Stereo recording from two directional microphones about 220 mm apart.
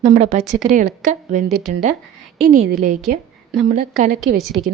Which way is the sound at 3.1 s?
35° right (ahead or behind).